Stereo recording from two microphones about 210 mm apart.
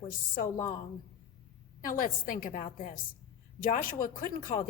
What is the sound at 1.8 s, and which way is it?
A woman's voice, 40° left (ahead or behind).